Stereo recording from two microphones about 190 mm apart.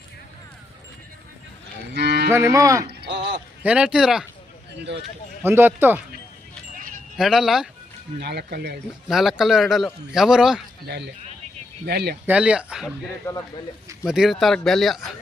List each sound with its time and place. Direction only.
1.9 s cattle: 60° right (ahead or behind)
2.3 s speech: 15° right (ahead or behind)
3.0 s a sound: 65° right (ahead or behind)
3.6 s a man's voice: 5° right (ahead or behind)
5.4 s speech: 10° right (ahead or behind)
7.2 s a man's voice: centre (ahead or behind)
8.2 s speech: 60° right (ahead or behind)
9.0 s a man's voice: centre (ahead or behind)
10.8 s speech: 60° right (ahead or behind)
12.2 s a man's voice: 5° right (ahead or behind)
13.2 s speech: 15° left (ahead or behind)
14.0 s a man's voice: centre (ahead or behind)